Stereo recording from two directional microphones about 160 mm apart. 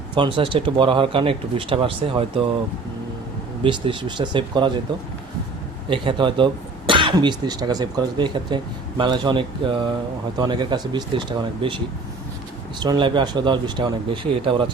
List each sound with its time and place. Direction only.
0.1 s speech: 30° right (ahead or behind)
3.6 s speech: 30° right (ahead or behind)
5.9 s speech: 30° right (ahead or behind)
12.8 s speech: 30° right (ahead or behind)